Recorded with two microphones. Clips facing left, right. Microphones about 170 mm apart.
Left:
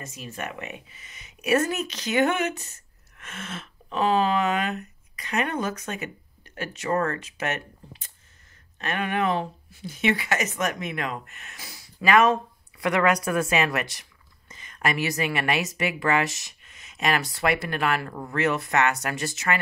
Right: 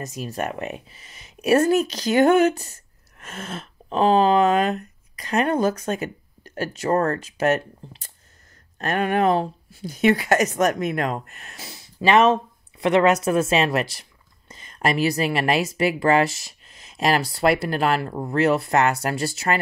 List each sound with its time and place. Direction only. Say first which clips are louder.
0.0 s speech: right 7 dB; 40° right (ahead or behind)